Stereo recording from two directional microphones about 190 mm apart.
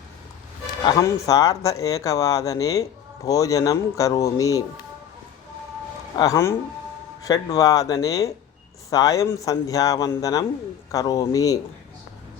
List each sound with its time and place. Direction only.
0.9 s speech: 15° left (ahead or behind)
6.1 s speech: 15° left (ahead or behind)